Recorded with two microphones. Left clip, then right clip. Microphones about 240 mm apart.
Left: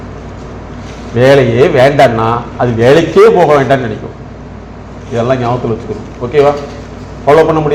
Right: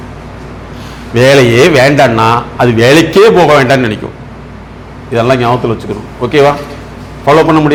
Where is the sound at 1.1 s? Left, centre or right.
Right.